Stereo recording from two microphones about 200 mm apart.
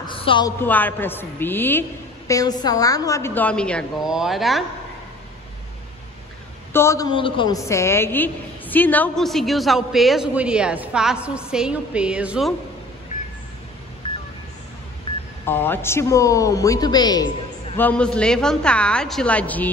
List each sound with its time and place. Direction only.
0.0 s a woman's voice: 25° left (ahead or behind); by 4.6 s centre (ahead or behind)
6.7 s a man's voice: 15° left (ahead or behind); by 12.5 s 5° right (ahead or behind)
15.4 s a woman's voice: 10° left (ahead or behind)
17.7 s a man's voice: 5° left (ahead or behind)